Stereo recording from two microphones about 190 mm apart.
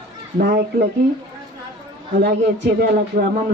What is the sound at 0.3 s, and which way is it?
Speech, 55° right (ahead or behind).